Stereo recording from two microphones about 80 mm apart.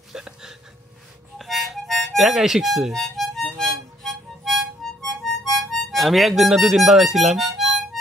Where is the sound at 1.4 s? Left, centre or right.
Centre.